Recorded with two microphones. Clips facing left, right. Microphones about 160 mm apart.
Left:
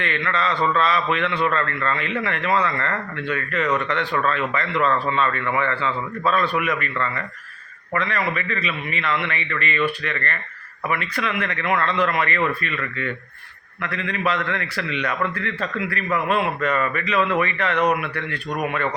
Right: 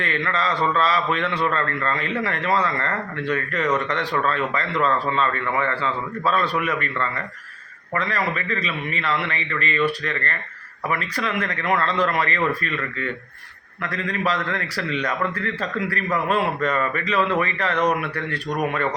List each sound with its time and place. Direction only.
0.0 s a man's voice: 35° right (ahead or behind)
7.9 s a man's voice: 35° right (ahead or behind)